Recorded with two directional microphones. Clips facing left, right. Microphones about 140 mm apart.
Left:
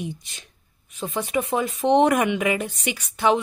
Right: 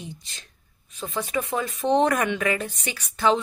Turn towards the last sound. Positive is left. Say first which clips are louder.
# left 1 dB
turn(degrees=15)  # may be behind; listen again after turning